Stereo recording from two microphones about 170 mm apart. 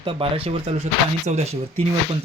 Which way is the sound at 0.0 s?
35° right (ahead or behind).